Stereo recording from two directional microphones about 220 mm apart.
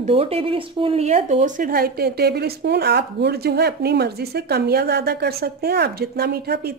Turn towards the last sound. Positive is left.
turn(degrees=-45)  # may be behind; listen again after turning